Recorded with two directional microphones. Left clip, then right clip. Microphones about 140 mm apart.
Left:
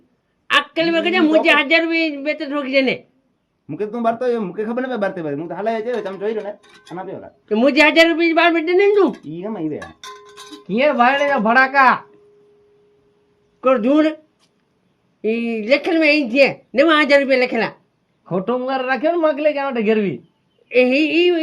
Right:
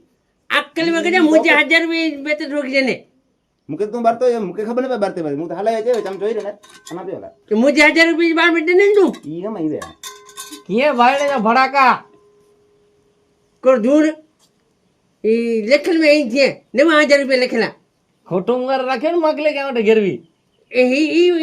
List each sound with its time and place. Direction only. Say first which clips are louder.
0.4 s a woman's voice: left 1 dB; 35° left (ahead or behind)
3.7 s speech: right 3 dB; 50° right (ahead or behind)
5.7 s speech: right 4 dB; 35° right (ahead or behind)
7.4 s speech: right 1 dB; 35° left (ahead or behind)
9.3 s speech: right 3 dB; 40° right (ahead or behind)
10.7 s speech: right 1 dB; 15° right (ahead or behind)
13.6 s speech: right 2 dB; 40° left (ahead or behind)
15.2 s speech: right 5 dB; 35° left (ahead or behind)
18.3 s a man's voice: right 3 dB; 20° right (ahead or behind)
20.7 s speech: even; 35° left (ahead or behind)